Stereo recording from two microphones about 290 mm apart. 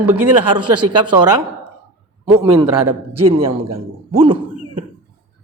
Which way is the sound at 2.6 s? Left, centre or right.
Right.